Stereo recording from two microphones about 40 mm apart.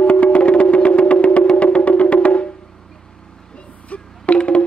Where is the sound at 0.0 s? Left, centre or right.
Left.